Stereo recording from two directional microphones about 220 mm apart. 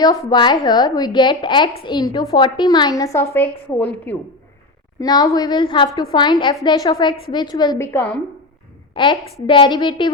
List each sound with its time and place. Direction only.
0.0 s a woman's voice: 20° left (ahead or behind)
8.9 s a woman's voice: 20° left (ahead or behind)